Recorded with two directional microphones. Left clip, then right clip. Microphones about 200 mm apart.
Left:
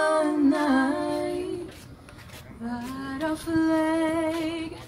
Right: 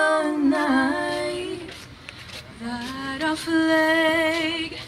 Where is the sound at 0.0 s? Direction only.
55° left (ahead or behind).